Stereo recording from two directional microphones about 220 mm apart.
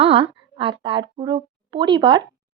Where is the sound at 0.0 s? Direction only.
25° right (ahead or behind).